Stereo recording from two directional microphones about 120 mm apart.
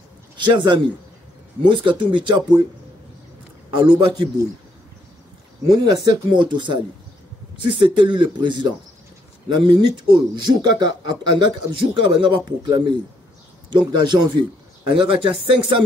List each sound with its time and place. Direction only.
0.5 s speech: 40° right (ahead or behind)
3.7 s speech: 40° right (ahead or behind)
5.7 s speech: 35° right (ahead or behind)